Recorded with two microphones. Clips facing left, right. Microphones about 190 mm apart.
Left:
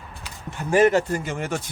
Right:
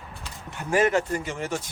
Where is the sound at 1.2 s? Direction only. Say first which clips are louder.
Left 2 dB; 55° left (ahead or behind).